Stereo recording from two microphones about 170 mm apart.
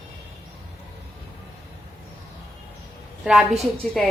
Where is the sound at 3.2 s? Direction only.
5° right (ahead or behind).